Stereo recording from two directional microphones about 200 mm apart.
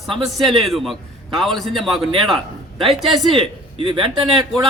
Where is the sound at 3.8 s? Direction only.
25° right (ahead or behind).